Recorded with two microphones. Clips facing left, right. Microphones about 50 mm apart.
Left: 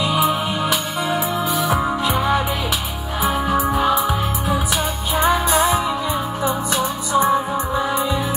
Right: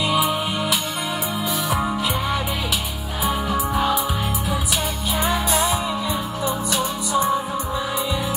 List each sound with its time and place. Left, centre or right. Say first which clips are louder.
5.2 s music: left 5 dB; left